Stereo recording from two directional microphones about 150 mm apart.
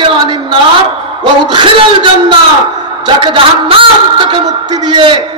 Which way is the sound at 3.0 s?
35° right (ahead or behind).